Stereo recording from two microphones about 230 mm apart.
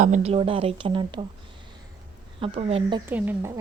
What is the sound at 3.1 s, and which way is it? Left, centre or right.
Speech, centre.